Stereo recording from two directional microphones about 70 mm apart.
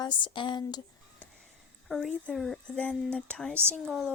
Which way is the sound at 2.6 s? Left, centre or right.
Centre.